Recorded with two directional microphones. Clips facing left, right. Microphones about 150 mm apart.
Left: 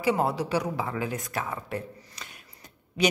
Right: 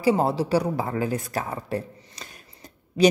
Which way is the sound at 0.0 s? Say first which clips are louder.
Right 4 dB; 30° right (ahead or behind).